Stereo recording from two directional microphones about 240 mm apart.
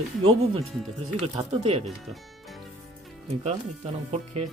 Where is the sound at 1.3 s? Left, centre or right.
Right.